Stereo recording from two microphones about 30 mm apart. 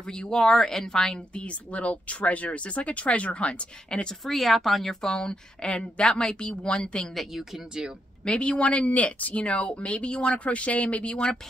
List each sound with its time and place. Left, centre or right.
0.0 s speech: left
1.4 s speech: left
4.2 s speech: centre
5.1 s a woman's voice: left
7.8 s speech: right
8.2 s speech: left
9.3 s a woman's voice: left